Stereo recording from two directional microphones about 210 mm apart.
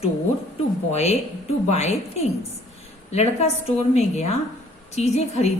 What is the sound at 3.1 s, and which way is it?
A woman's voice, 30° left (ahead or behind).